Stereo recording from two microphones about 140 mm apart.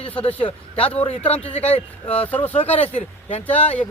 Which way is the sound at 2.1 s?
10° left (ahead or behind).